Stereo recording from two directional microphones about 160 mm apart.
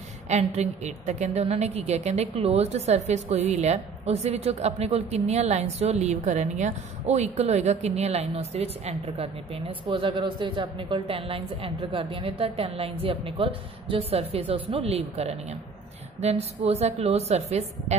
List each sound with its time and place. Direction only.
0.3 s a woman's voice: 45° right (ahead or behind)